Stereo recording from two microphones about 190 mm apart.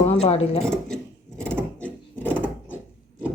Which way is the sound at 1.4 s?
5° left (ahead or behind).